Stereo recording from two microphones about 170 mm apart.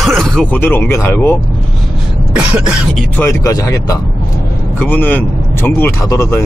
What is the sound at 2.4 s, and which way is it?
Speech, 5° right (ahead or behind).